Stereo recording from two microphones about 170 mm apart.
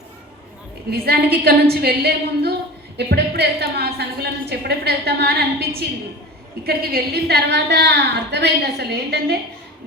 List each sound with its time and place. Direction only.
0.9 s a woman's voice: 65° right (ahead or behind)
6.7 s a woman's voice: 60° right (ahead or behind)